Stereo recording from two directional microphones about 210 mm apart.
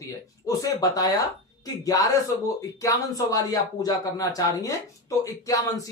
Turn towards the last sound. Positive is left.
turn(degrees=15)  # may be behind; listen again after turning